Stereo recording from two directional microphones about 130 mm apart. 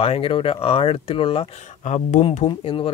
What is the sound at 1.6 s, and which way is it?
Speech, 70° left (ahead or behind).